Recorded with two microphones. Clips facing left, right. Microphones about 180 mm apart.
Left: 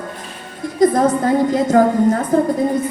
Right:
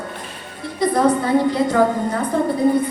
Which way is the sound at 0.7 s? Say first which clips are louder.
Left 3 dB; 45° left (ahead or behind).